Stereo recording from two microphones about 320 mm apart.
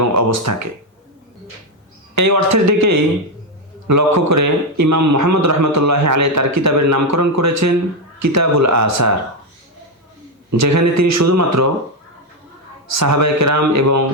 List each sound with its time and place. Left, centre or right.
0.0 s a man's voice: right
2.1 s a man's voice: right
10.5 s a man's voice: right
12.9 s a man's voice: right